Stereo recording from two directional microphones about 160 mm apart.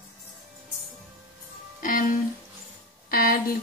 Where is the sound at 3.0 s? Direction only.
65° left (ahead or behind).